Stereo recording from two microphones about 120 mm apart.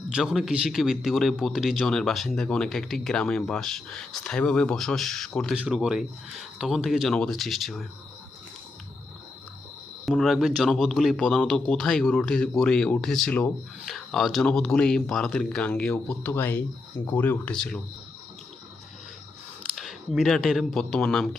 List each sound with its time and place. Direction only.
0.1 s a man's voice: 5° right (ahead or behind)
5.5 s a man's voice: 5° right (ahead or behind)
10.1 s a man's voice: centre (ahead or behind)
19.7 s speech: centre (ahead or behind)